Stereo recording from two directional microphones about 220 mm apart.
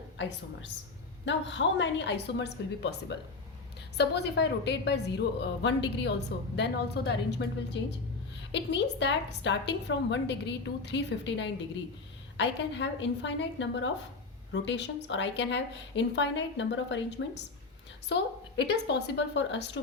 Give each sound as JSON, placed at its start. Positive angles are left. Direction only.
{"t": 1.2, "sound": "a woman's voice", "side_deg": 55}